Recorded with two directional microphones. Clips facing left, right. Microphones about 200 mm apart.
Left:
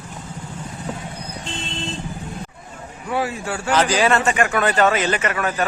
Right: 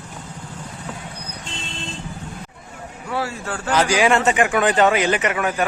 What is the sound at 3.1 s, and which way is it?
Speech, 15° left (ahead or behind).